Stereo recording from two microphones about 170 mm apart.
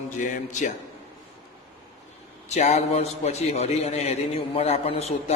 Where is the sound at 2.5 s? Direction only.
40° left (ahead or behind).